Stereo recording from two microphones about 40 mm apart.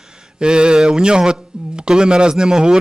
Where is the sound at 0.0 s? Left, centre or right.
Centre.